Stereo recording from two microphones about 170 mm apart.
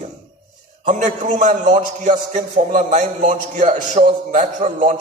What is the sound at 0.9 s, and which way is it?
A man's voice, 50° right (ahead or behind).